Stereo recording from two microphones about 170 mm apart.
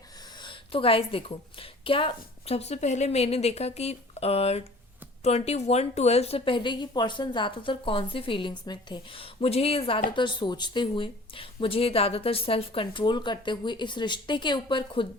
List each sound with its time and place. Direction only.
0.4 s a woman's voice: 30° left (ahead or behind)